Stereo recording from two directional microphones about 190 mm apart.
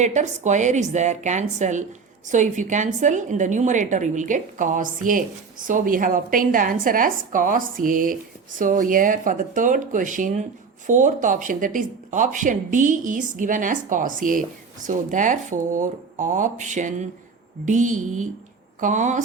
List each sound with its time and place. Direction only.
0.0 s a woman's voice: 40° right (ahead or behind)